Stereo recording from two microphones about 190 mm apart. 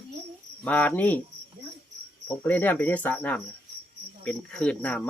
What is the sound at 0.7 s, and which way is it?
Cricket, 10° left (ahead or behind).